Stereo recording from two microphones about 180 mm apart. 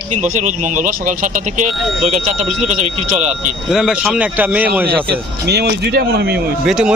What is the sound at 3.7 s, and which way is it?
A man's voice, centre (ahead or behind).